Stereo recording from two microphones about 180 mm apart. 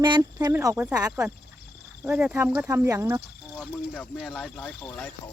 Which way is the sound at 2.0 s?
5° right (ahead or behind).